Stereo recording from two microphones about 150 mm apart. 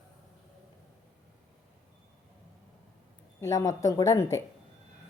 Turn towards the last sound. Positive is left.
turn(degrees=20)  # may be behind; listen again after turning